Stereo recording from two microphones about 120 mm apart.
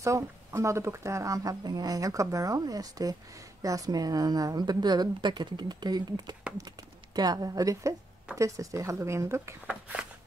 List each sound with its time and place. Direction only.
0.0 s speech: 25° right (ahead or behind)